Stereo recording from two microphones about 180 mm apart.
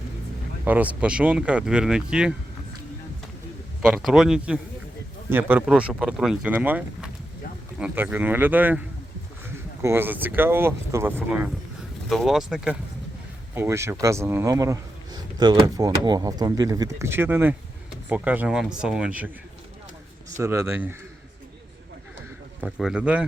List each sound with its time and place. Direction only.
0.6 s speech: 10° right (ahead or behind)
3.8 s speech: 5° right (ahead or behind)
9.8 s speech: 10° right (ahead or behind)
12.0 s speech: centre (ahead or behind)
13.5 s speech: 15° right (ahead or behind)
20.3 s speech: 15° right (ahead or behind)
22.6 s speech: 5° right (ahead or behind)